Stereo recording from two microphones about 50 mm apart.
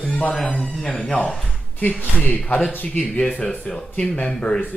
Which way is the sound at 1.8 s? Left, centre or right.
Left.